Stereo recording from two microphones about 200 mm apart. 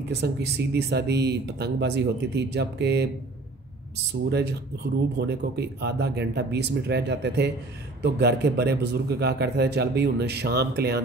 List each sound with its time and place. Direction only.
0.1 s a man's voice: 55° right (ahead or behind)
4.1 s a man's voice: 55° right (ahead or behind)